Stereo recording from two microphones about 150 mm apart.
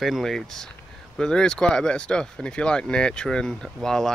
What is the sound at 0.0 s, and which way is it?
Speech, centre (ahead or behind).